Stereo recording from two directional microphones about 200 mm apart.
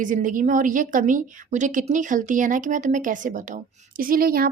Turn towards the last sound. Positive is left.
turn(degrees=-45)  # may be behind; listen again after turning